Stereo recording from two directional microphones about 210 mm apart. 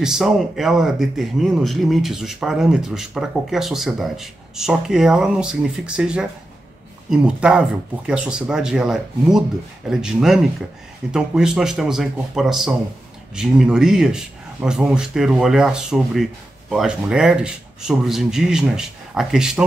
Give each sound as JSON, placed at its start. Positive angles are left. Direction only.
{"t": 0.0, "sound": "speech", "side_deg": 0}